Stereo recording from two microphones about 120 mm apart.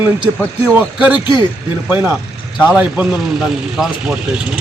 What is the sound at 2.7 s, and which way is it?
Speech, 10° right (ahead or behind).